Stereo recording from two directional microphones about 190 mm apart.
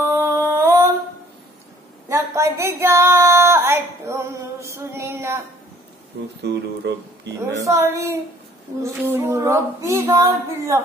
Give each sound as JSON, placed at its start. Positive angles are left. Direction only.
{"t": 0.0, "sound": "humming", "side_deg": -15}
{"t": 2.0, "sound": "speech", "side_deg": -15}
{"t": 6.4, "sound": "speech", "side_deg": -65}
{"t": 7.6, "sound": "speech", "side_deg": -15}